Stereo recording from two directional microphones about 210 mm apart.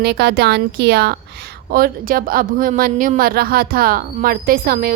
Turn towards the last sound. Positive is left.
turn(degrees=-40)  # may be behind; listen again after turning